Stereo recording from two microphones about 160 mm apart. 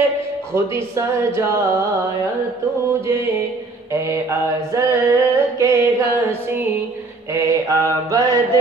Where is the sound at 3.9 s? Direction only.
15° right (ahead or behind).